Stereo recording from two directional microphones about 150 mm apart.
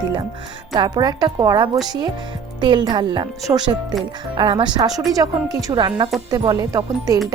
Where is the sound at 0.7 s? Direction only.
25° right (ahead or behind).